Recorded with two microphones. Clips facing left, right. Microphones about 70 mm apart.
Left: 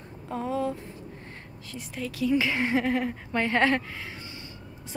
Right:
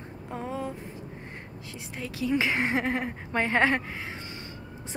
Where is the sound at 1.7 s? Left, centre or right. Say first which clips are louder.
Left 3 dB; right.